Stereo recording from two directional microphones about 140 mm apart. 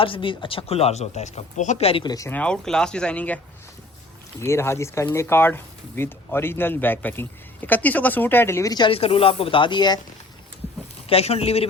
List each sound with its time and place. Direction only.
0.0 s speech: 40° left (ahead or behind)
2.0 s speech: 25° left (ahead or behind)
2.3 s speech: 5° left (ahead or behind); by 8.9 s 25° left (ahead or behind)
8.9 s speech: 45° left (ahead or behind)
11.1 s speech: 45° left (ahead or behind)